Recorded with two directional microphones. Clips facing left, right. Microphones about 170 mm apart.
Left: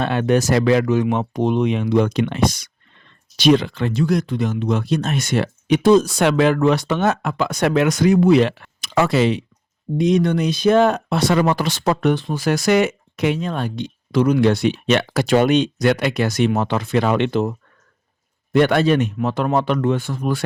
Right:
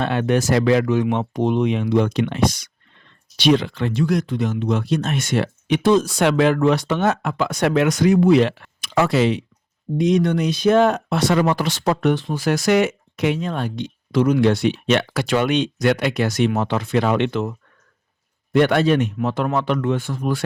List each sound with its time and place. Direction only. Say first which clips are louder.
0.0 s speech: left 2 dB; 40° left (ahead or behind)
1.6 s speech: left 1 dB; 55° left (ahead or behind)
3.3 s speech: left 2 dB; 45° left (ahead or behind)